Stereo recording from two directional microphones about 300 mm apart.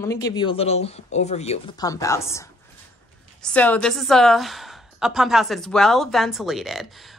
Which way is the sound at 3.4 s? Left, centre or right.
Centre.